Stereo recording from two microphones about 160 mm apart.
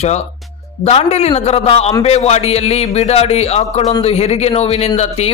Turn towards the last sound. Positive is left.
turn(degrees=40)  # may be behind; listen again after turning